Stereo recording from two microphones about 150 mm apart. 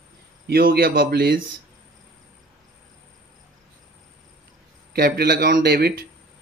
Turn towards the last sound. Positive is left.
turn(degrees=-90)